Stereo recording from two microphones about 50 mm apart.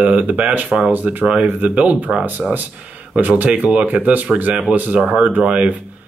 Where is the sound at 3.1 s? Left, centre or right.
Right.